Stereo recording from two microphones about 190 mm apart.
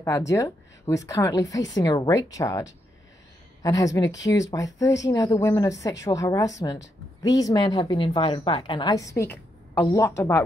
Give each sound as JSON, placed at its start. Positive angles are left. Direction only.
{"t": 0.0, "sound": "a woman's voice", "side_deg": 15}